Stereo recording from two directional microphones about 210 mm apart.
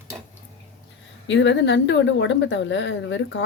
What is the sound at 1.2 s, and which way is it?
Speech, 60° left (ahead or behind).